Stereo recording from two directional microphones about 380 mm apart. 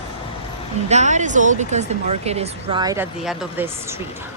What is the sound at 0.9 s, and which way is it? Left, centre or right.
Speech, centre.